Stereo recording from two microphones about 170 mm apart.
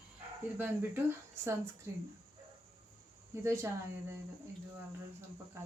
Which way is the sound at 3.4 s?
15° right (ahead or behind).